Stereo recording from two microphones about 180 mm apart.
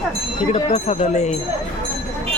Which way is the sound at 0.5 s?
40° left (ahead or behind).